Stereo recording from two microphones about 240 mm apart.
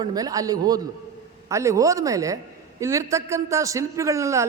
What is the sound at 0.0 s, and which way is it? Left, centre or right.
A man's voice, centre.